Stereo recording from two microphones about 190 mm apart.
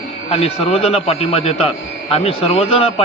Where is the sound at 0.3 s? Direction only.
30° left (ahead or behind).